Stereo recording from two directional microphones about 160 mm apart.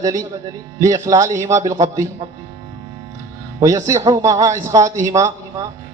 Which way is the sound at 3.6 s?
20° right (ahead or behind).